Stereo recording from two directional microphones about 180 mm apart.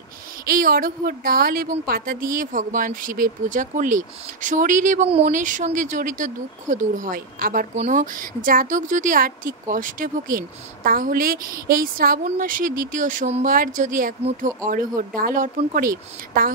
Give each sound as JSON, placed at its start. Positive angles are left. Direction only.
{"t": 0.5, "sound": "a woman's voice", "side_deg": -50}
{"t": 7.7, "sound": "a woman's voice", "side_deg": -40}